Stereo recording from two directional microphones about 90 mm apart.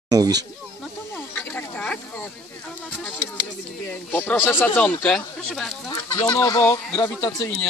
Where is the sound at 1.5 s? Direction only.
15° left (ahead or behind).